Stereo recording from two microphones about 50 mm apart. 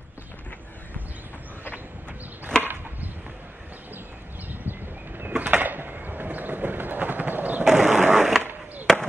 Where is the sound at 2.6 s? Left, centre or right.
Right.